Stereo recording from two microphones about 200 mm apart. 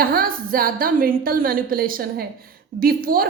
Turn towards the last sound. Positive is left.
turn(degrees=-45)  # may be behind; listen again after turning